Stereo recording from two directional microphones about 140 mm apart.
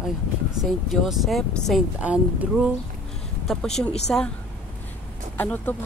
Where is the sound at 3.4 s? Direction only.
5° left (ahead or behind).